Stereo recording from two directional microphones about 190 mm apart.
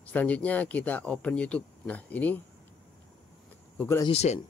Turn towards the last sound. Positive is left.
turn(degrees=35)  # may be behind; listen again after turning